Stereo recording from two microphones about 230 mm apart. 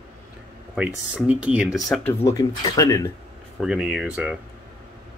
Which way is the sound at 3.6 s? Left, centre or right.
Centre.